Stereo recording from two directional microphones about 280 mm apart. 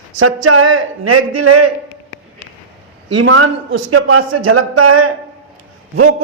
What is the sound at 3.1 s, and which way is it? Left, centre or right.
A man's voice, right.